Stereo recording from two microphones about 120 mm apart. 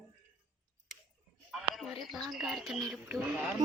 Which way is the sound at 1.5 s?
Centre (ahead or behind).